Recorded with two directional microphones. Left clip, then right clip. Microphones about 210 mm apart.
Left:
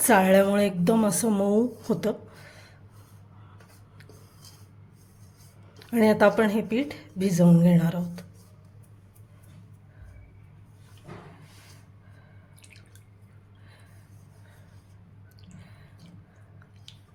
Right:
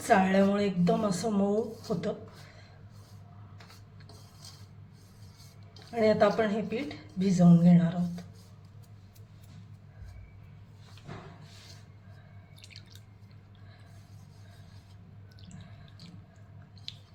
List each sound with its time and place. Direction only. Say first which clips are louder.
0.1 s a woman's voice: left 5 dB; 50° left (ahead or behind)
5.9 s a woman's voice: left 4 dB; 50° left (ahead or behind)